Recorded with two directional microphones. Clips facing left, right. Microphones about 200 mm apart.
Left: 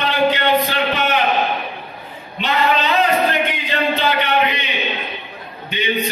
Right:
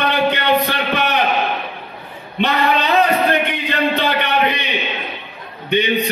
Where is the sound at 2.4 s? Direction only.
60° right (ahead or behind).